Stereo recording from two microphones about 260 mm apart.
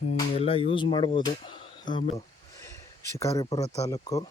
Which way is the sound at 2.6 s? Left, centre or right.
Centre.